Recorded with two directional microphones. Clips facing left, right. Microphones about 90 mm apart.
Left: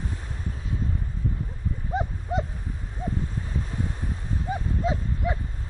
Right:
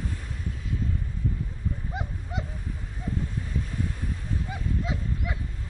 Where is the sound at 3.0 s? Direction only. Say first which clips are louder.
Left 3 dB; 30° left (ahead or behind).